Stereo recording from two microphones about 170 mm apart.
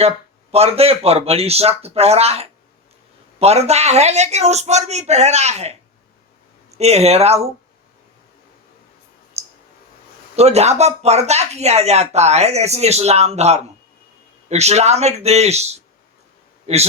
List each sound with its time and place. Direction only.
0.5 s speech: 35° right (ahead or behind)
9.4 s clicking: 40° right (ahead or behind)
10.3 s speech: 40° right (ahead or behind)